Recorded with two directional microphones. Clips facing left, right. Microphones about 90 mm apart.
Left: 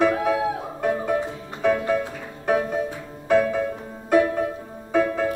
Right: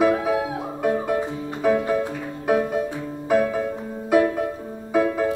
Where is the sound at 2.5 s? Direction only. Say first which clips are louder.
Right 1 dB; centre (ahead or behind).